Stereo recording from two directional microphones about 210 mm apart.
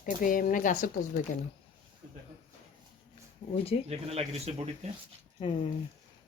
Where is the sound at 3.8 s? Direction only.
30° right (ahead or behind).